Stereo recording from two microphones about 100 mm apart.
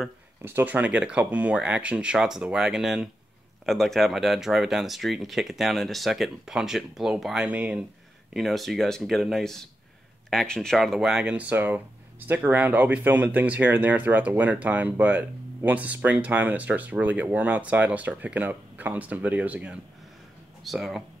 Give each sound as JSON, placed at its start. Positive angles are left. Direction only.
{"t": 0.4, "sound": "speech", "side_deg": -20}
{"t": 8.3, "sound": "speech", "side_deg": 0}
{"t": 20.6, "sound": "speech", "side_deg": 0}